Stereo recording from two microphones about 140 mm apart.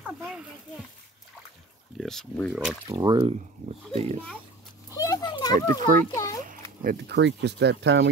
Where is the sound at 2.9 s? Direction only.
30° right (ahead or behind).